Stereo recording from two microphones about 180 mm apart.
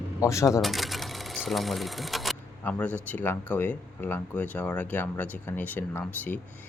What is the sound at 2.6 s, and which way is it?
Speech, 10° left (ahead or behind).